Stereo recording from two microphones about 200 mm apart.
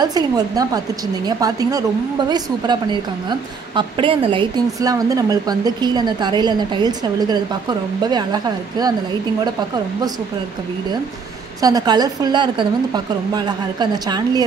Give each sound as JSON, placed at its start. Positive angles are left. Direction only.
{"t": 0.0, "sound": "a woman's voice", "side_deg": -20}
{"t": 11.6, "sound": "a woman's voice", "side_deg": -20}